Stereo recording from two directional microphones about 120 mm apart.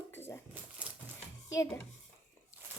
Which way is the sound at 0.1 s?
20° left (ahead or behind).